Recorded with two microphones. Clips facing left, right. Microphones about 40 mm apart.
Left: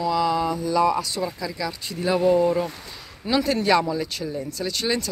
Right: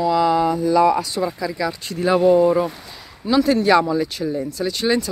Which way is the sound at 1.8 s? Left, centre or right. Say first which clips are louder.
Right 5 dB; right.